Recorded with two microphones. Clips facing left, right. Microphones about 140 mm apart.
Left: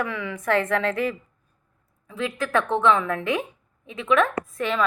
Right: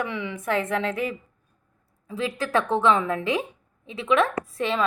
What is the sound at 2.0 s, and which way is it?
A woman's voice, 35° right (ahead or behind).